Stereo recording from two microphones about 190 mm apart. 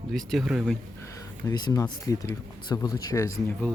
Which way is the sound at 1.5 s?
20° left (ahead or behind).